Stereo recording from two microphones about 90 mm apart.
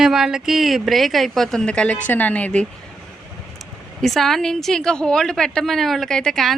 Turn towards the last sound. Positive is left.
turn(degrees=5)  # may be behind; listen again after turning